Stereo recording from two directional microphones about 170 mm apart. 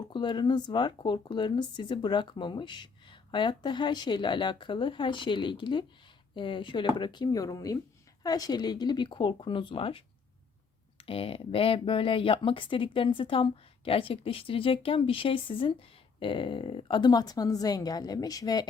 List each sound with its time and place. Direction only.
0.1 s speech: 25° left (ahead or behind)
11.0 s speech: 35° left (ahead or behind)